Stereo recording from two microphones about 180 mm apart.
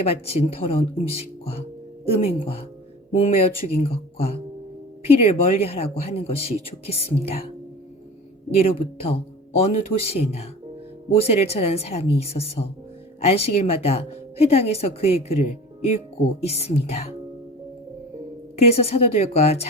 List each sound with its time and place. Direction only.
0.0 s speech: 35° left (ahead or behind)
8.6 s speech: 35° left (ahead or behind)
18.5 s speech: 35° left (ahead or behind)